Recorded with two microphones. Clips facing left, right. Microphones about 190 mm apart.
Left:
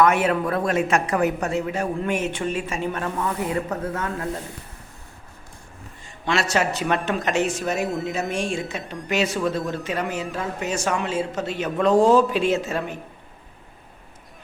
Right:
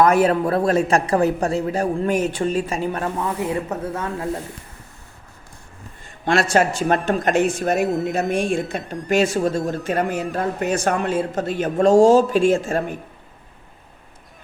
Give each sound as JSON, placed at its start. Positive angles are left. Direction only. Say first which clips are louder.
{"t": 0.0, "sound": "a woman's voice", "louder": "right 3 dB", "side_deg": -35}
{"t": 6.1, "sound": "speech", "louder": "right 4 dB", "side_deg": -55}
{"t": 7.9, "sound": "speech", "louder": "right 5 dB", "side_deg": 0}
{"t": 8.3, "sound": "speech", "louder": "right 5 dB", "side_deg": -55}